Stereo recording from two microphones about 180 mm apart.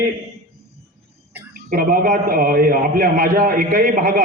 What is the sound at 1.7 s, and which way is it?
A man's voice, 55° right (ahead or behind).